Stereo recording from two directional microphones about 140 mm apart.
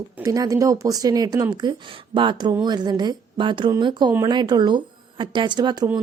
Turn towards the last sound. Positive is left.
turn(degrees=-30)  # may be behind; listen again after turning